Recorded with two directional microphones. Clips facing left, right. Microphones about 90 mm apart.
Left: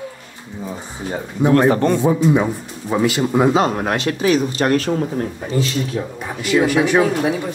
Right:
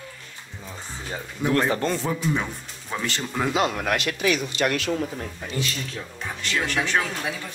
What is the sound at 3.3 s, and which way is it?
Speech, 30° left (ahead or behind).